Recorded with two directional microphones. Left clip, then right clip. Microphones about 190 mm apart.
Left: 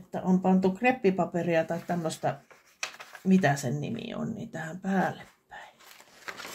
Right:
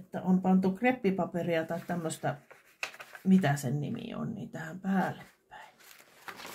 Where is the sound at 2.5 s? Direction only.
Centre (ahead or behind).